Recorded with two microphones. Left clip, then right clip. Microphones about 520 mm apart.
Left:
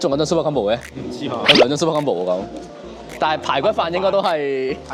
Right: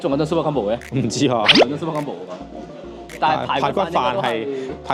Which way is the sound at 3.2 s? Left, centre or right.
Left.